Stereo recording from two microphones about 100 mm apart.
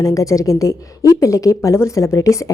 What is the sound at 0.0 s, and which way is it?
A woman's voice, 35° left (ahead or behind).